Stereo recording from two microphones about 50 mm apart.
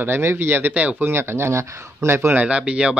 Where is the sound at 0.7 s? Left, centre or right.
Right.